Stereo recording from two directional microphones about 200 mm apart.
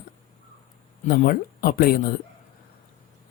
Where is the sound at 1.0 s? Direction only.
45° left (ahead or behind).